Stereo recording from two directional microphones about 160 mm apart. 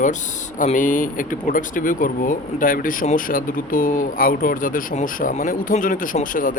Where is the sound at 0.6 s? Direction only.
55° left (ahead or behind).